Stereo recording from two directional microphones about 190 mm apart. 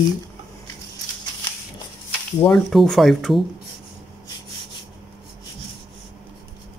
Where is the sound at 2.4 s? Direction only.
5° left (ahead or behind).